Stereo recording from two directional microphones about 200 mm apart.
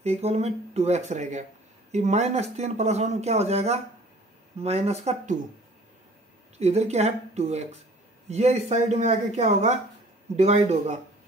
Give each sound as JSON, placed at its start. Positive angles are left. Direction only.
{"t": 0.0, "sound": "speech", "side_deg": -30}
{"t": 6.6, "sound": "speech", "side_deg": -35}